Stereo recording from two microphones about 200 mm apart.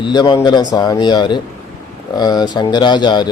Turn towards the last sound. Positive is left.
turn(degrees=20)  # may be behind; listen again after turning